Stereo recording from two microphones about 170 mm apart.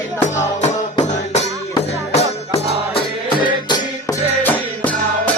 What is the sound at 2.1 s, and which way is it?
Music, 35° left (ahead or behind).